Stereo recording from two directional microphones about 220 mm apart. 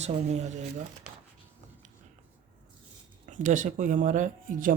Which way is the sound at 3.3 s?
35° right (ahead or behind).